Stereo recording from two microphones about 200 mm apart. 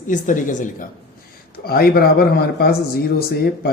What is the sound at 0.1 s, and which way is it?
A woman's voice, 40° left (ahead or behind).